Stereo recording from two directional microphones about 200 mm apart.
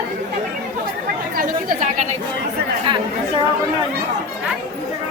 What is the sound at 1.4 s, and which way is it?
Chatter, 40° right (ahead or behind).